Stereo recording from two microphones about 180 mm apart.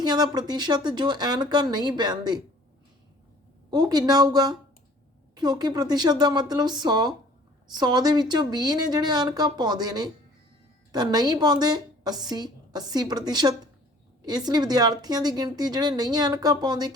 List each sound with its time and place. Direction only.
0.0 s a woman's voice: 25° right (ahead or behind)
3.7 s a woman's voice: 20° right (ahead or behind)